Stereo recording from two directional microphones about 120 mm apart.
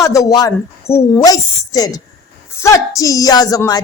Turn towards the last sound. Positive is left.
turn(degrees=30)  # may be behind; listen again after turning